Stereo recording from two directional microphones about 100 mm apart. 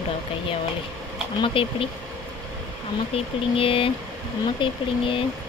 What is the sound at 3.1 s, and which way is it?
Speech, 65° left (ahead or behind).